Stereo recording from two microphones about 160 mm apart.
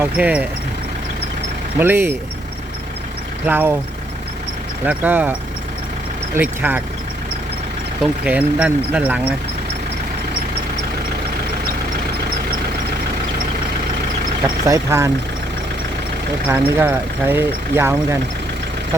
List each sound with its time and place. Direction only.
0.0 s speech: 10° right (ahead or behind)
1.8 s speech: 15° right (ahead or behind)
3.4 s speech: 10° right (ahead or behind)
4.9 s speech: 10° right (ahead or behind)
8.0 s speech: 10° right (ahead or behind)
14.7 s speech: 15° right (ahead or behind)
16.5 s speech: 15° right (ahead or behind)